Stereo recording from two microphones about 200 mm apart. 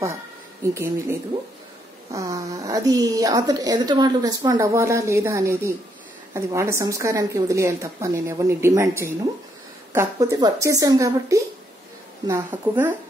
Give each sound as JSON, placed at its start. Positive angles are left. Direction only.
{"t": 0.7, "sound": "a woman's voice", "side_deg": -15}
{"t": 2.1, "sound": "a woman's voice", "side_deg": -15}